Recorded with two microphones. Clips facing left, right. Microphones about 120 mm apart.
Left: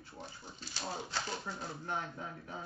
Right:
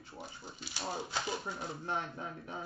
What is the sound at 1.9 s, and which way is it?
Speech, 25° right (ahead or behind).